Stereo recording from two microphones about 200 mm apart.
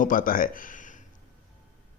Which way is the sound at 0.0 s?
45° left (ahead or behind).